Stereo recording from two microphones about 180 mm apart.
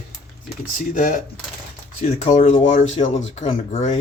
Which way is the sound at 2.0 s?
35° left (ahead or behind).